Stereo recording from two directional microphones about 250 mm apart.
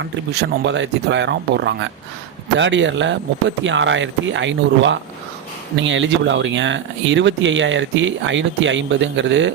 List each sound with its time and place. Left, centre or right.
0.0 s speech: right